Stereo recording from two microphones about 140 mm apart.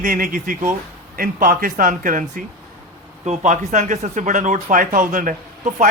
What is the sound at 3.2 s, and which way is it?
Speech, 60° right (ahead or behind).